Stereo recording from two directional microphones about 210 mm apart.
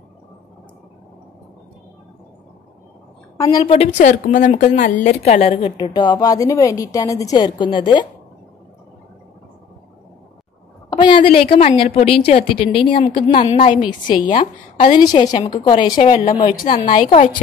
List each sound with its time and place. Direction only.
3.3 s a woman's voice: 20° left (ahead or behind)
10.9 s a sound: 20° left (ahead or behind)
11.3 s a woman's voice: 30° left (ahead or behind)
14.3 s a woman's voice: 35° left (ahead or behind)
14.9 s a woman's voice: 20° left (ahead or behind)